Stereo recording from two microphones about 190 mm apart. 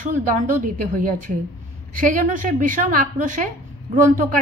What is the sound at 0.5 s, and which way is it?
A woman's voice, 45° right (ahead or behind).